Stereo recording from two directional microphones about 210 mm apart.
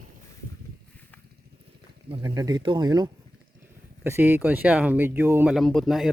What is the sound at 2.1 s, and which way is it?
Speech, 15° right (ahead or behind).